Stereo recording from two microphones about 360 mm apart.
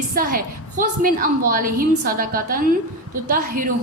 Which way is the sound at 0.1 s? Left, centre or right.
Right.